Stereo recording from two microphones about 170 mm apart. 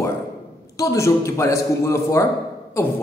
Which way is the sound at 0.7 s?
15° left (ahead or behind).